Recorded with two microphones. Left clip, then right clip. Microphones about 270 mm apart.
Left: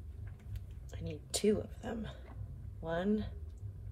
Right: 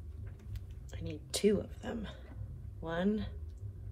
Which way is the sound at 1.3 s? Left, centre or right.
Centre.